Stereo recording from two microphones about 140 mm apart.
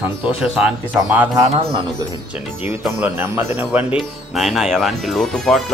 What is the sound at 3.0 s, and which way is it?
Speech, 15° right (ahead or behind).